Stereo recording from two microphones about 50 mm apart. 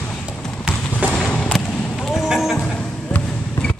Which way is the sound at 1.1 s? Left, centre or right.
Centre.